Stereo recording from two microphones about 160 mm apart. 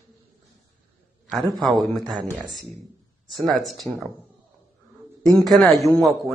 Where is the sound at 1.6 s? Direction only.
Centre (ahead or behind).